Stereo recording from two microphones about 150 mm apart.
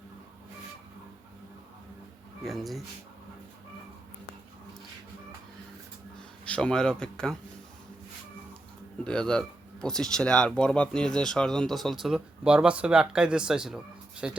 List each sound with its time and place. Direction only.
2.4 s speech: centre (ahead or behind)
6.1 s speech: 5° left (ahead or behind)
9.0 s speech: 5° left (ahead or behind)